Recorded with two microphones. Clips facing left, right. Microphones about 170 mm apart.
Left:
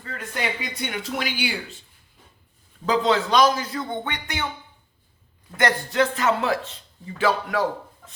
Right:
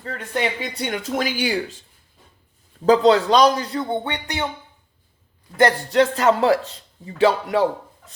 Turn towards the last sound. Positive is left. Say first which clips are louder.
# right 5 dB
turn(degrees=-30)  # may be behind; listen again after turning